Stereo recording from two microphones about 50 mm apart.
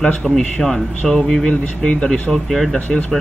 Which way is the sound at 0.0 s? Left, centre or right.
Centre.